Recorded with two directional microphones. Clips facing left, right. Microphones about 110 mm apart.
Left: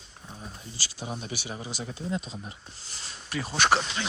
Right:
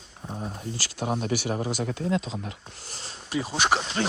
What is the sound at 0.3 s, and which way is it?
Speech, 60° right (ahead or behind).